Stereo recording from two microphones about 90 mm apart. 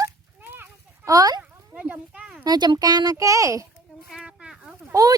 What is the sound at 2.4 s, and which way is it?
Speech, 50° right (ahead or behind).